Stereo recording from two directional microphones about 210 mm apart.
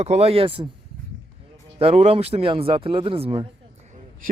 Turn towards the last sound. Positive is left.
turn(degrees=-25)  # may be behind; listen again after turning